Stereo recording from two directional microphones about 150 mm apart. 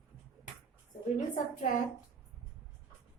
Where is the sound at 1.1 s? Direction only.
60° left (ahead or behind).